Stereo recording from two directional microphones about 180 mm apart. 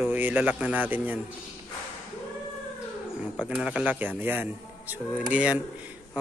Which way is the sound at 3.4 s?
5° right (ahead or behind).